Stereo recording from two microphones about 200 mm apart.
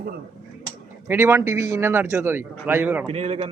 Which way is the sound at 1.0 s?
10° right (ahead or behind).